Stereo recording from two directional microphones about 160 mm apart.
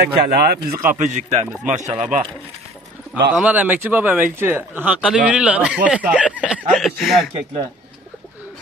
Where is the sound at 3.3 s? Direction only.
10° right (ahead or behind).